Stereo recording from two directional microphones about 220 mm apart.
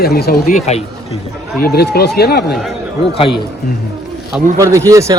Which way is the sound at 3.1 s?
25° left (ahead or behind).